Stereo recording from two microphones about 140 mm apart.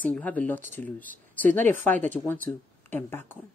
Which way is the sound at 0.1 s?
10° left (ahead or behind).